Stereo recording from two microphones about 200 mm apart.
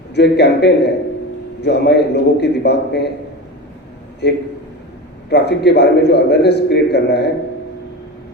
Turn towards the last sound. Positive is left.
turn(degrees=55)  # may be behind; listen again after turning